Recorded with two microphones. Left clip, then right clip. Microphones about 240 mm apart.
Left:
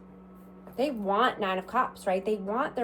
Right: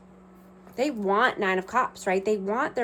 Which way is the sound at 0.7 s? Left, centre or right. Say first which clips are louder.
Right 3 dB; right.